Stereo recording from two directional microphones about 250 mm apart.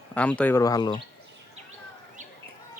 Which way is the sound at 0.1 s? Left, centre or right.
Centre.